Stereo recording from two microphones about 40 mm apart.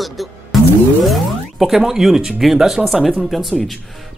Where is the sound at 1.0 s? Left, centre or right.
Centre.